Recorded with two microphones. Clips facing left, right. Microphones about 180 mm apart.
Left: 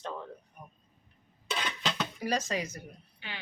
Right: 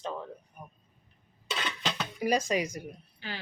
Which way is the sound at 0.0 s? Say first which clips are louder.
Right 2 dB; 10° right (ahead or behind).